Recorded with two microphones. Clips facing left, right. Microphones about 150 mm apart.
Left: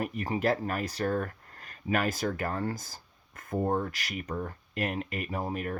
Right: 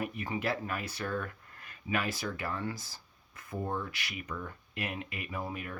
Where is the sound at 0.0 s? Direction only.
40° left (ahead or behind).